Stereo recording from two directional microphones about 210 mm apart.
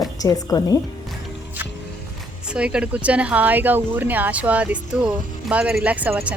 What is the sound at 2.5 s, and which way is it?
A woman's voice, 5° right (ahead or behind).